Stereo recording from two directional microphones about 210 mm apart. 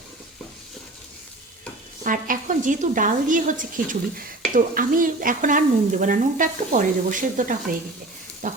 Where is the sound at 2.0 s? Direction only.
40° right (ahead or behind).